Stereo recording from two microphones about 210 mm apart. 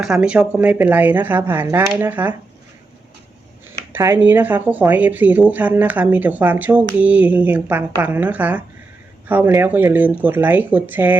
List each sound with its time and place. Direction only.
0.0 s speech: 5° right (ahead or behind)
3.9 s speech: 10° right (ahead or behind)